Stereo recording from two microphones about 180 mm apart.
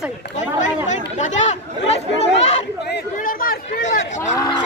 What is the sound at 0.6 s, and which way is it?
Speech, 40° left (ahead or behind).